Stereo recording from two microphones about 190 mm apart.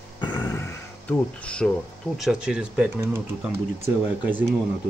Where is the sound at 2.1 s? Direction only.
5° right (ahead or behind).